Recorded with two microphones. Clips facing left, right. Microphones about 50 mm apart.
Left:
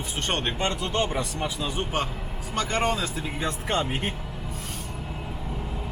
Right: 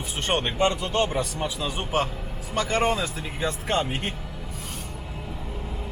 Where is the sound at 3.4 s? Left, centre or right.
Centre.